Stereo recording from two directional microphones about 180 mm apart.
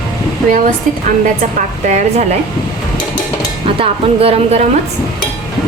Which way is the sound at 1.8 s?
40° right (ahead or behind).